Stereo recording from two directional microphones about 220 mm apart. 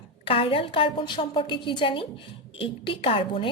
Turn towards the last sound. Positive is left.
turn(degrees=20)  # may be behind; listen again after turning